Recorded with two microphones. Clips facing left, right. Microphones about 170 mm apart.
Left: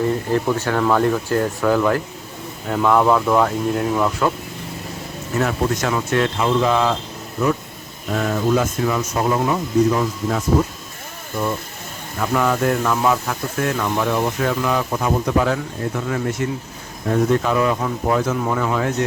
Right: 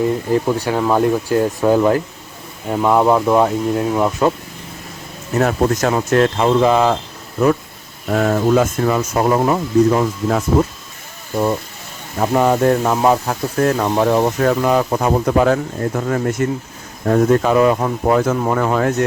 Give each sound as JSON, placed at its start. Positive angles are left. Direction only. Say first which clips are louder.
{"t": 0.3, "sound": "speech", "louder": "right 2 dB", "side_deg": -15}
{"t": 5.4, "sound": "speech", "louder": "right 5 dB", "side_deg": -45}
{"t": 8.1, "sound": "speech", "louder": "right 4 dB", "side_deg": -50}
{"t": 12.2, "sound": "speech", "louder": "right 5 dB", "side_deg": -35}